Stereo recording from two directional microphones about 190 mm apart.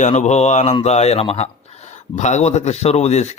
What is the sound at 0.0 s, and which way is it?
Speech, 35° left (ahead or behind).